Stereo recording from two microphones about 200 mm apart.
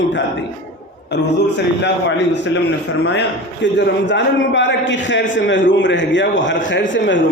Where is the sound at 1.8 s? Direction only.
60° left (ahead or behind).